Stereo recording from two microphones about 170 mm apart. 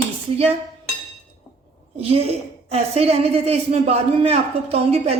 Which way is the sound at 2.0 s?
35° right (ahead or behind).